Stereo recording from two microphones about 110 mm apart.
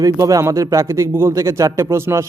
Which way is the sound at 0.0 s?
30° right (ahead or behind).